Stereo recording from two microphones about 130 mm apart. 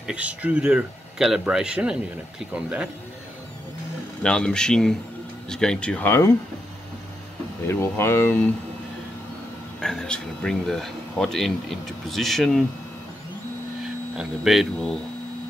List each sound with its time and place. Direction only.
0.0 s speech: 10° right (ahead or behind)
4.2 s speech: 5° left (ahead or behind)
7.6 s speech: 20° left (ahead or behind)
9.8 s speech: 5° left (ahead or behind)
14.1 s speech: 5° right (ahead or behind)